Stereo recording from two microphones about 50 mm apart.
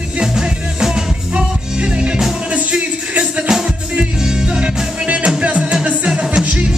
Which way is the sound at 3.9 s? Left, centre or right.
Centre.